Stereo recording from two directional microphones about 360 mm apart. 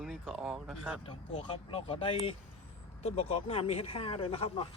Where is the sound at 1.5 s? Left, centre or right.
Centre.